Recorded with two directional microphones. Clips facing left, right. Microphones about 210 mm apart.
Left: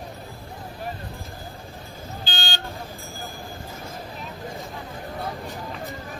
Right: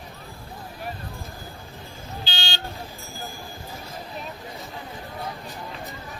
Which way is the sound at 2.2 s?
50° left (ahead or behind).